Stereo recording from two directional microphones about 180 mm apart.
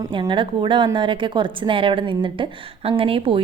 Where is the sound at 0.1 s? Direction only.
25° right (ahead or behind).